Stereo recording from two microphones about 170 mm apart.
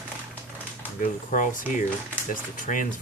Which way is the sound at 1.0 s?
50° left (ahead or behind).